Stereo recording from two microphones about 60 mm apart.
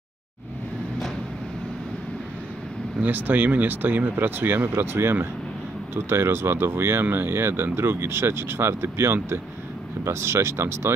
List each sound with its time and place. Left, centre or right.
3.0 s speech: right